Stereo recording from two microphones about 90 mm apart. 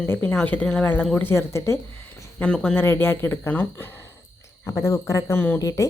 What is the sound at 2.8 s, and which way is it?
Speech, 25° left (ahead or behind).